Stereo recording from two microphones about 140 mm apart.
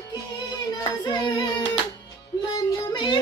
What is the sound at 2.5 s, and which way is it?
Music, 30° left (ahead or behind).